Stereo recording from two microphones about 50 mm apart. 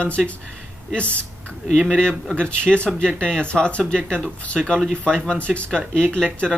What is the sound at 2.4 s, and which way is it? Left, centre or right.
Speech, centre.